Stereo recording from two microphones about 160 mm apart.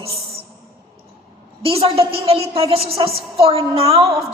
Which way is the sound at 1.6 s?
35° right (ahead or behind).